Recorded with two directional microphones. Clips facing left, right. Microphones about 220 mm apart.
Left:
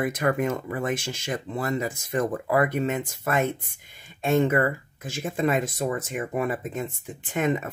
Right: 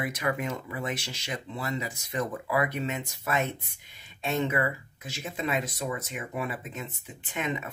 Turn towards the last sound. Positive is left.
turn(degrees=45)  # may be behind; listen again after turning